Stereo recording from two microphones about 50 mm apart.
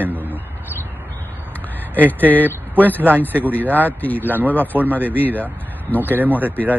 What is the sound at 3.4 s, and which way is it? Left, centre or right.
Speech, left.